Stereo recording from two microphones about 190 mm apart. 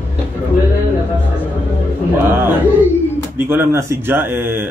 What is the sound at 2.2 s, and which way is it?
Speech, 10° right (ahead or behind).